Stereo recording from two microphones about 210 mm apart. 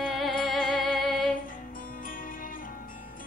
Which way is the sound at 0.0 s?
Centre (ahead or behind).